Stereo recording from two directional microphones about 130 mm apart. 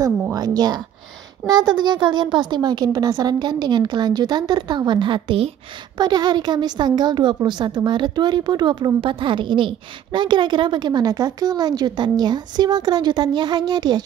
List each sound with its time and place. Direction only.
0.3 s a woman's voice: 30° right (ahead or behind)